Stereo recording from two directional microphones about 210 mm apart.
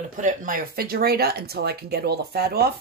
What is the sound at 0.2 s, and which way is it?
Speech, 40° right (ahead or behind).